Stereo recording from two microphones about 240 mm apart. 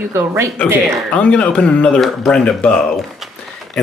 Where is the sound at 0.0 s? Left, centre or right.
Centre.